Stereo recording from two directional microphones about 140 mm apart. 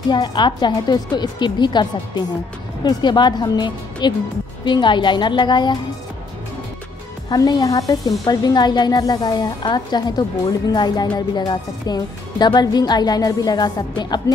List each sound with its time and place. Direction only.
0.1 s speech: 30° left (ahead or behind)
7.2 s speech: 25° left (ahead or behind)